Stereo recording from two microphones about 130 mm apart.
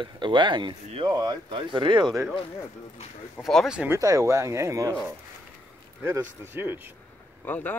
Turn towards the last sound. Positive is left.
turn(degrees=15)  # may be behind; listen again after turning